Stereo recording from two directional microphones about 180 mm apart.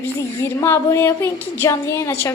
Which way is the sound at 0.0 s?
15° left (ahead or behind).